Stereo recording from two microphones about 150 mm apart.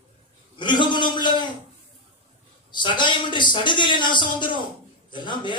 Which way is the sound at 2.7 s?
30° left (ahead or behind).